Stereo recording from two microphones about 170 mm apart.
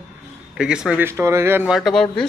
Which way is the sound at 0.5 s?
5° right (ahead or behind).